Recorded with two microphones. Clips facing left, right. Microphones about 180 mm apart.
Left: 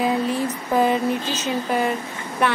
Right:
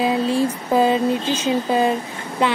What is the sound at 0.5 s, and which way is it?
Speech, 20° right (ahead or behind).